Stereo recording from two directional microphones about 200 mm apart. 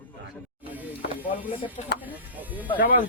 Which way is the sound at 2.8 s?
45° left (ahead or behind).